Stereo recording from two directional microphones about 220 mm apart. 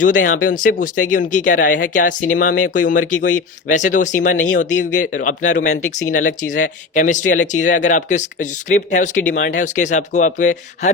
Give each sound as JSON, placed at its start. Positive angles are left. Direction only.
{"t": 0.0, "sound": "speech", "side_deg": 35}